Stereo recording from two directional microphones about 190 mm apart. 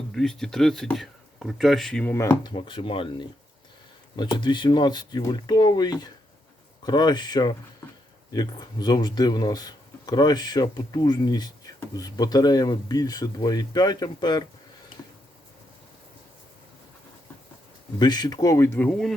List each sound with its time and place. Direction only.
0.1 s speech: centre (ahead or behind)
2.4 s speech: 25° left (ahead or behind)
18.0 s speech: 20° left (ahead or behind); by 19.1 s 5° left (ahead or behind)